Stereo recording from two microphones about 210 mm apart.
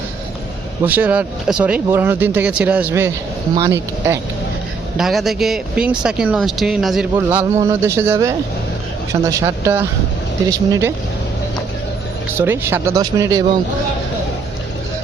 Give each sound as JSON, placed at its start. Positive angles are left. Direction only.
{"t": 0.8, "sound": "speech", "side_deg": -10}
{"t": 4.9, "sound": "speech", "side_deg": 0}
{"t": 7.2, "sound": "speech", "side_deg": -15}
{"t": 12.4, "sound": "speech", "side_deg": -10}